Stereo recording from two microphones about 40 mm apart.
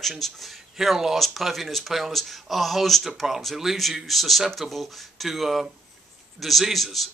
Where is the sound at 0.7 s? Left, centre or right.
Centre.